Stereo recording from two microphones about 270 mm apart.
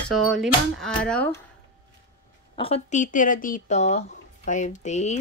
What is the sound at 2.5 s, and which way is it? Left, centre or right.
Speech, left.